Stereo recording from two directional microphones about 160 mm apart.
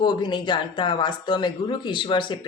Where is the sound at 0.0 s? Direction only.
30° left (ahead or behind).